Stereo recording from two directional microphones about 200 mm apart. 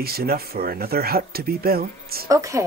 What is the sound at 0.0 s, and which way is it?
Speech, 50° right (ahead or behind).